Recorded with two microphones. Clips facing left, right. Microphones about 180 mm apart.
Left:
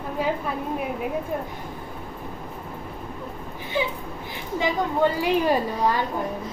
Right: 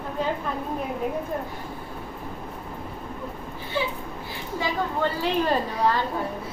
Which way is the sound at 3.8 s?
15° left (ahead or behind).